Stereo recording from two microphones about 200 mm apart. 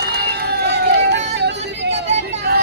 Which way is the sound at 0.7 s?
60° right (ahead or behind).